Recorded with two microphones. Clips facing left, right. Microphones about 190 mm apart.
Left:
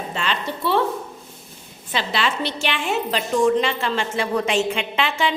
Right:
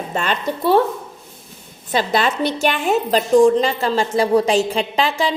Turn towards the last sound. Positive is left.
turn(degrees=-35)  # may be behind; listen again after turning